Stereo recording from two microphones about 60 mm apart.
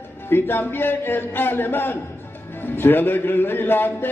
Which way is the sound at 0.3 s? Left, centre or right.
Left.